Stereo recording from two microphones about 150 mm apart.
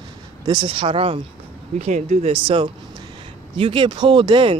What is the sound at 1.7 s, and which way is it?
Speech, 45° right (ahead or behind).